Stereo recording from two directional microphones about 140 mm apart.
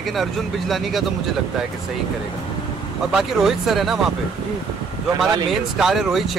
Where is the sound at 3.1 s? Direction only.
5° right (ahead or behind).